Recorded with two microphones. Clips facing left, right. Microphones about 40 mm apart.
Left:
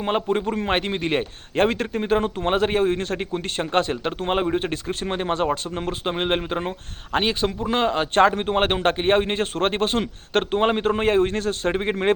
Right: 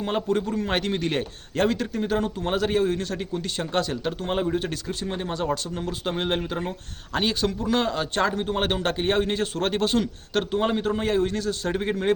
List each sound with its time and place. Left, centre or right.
0.0 s a man's voice: left
0.4 s a man's voice: left
0.7 s speech: left